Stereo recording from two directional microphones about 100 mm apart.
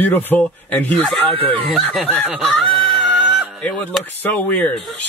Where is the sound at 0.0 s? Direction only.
20° left (ahead or behind).